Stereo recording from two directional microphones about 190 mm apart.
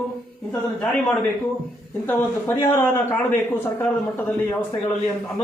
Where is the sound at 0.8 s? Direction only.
5° left (ahead or behind).